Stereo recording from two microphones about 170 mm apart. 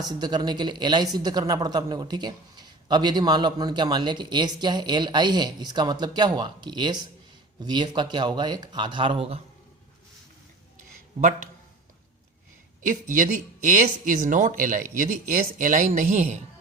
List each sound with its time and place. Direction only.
0.0 s speech: 25° right (ahead or behind)
12.8 s speech: 50° right (ahead or behind)